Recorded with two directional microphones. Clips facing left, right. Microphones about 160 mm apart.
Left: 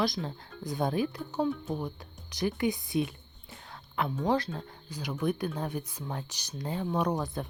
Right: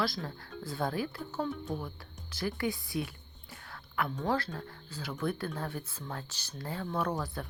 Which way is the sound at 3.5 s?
20° left (ahead or behind).